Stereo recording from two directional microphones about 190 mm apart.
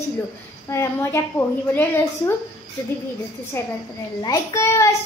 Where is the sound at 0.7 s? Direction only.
15° left (ahead or behind).